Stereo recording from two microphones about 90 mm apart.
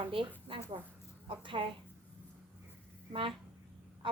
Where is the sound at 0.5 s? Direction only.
70° right (ahead or behind).